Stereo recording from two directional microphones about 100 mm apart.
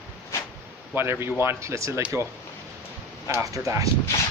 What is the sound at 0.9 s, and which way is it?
Speech, 25° right (ahead or behind).